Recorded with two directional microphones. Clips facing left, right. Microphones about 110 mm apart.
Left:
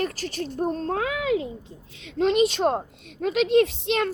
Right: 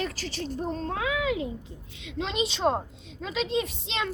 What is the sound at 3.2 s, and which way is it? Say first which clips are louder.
Speech: left 9 dB; 60° left (ahead or behind).